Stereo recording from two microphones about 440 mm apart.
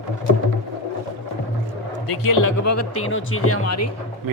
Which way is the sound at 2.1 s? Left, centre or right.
Left.